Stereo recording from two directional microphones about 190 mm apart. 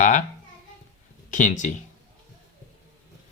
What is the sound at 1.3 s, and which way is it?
Speech, 40° left (ahead or behind).